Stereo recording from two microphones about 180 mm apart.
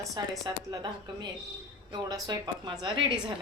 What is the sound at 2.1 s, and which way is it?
A woman's voice, 20° right (ahead or behind).